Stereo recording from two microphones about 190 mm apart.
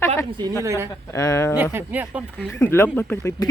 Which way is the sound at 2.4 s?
10° left (ahead or behind).